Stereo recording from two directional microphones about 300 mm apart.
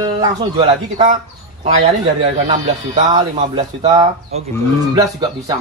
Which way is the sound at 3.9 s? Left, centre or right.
Centre.